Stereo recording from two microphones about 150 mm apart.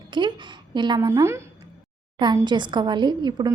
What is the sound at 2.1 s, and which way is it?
A woman's voice, 30° right (ahead or behind).